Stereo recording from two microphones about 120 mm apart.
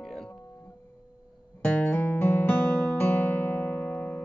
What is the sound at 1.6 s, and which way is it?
Music, 10° left (ahead or behind).